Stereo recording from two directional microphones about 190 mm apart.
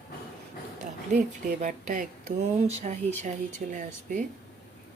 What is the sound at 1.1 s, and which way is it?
Speech, 40° right (ahead or behind).